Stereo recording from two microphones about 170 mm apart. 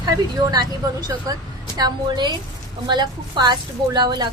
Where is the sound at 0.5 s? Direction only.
20° right (ahead or behind).